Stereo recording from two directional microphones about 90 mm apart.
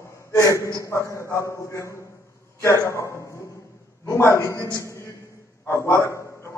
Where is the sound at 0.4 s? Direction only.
35° left (ahead or behind).